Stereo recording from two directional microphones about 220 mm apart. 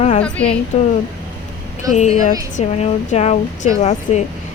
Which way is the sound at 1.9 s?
35° left (ahead or behind).